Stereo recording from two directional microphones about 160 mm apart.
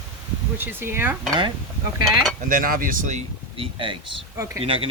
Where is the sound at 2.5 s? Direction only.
60° right (ahead or behind).